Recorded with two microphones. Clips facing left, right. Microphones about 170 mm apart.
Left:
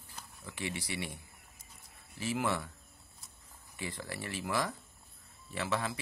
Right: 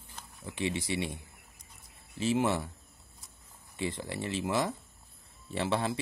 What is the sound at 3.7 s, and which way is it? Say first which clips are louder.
Speech: right 6 dB; 25° right (ahead or behind).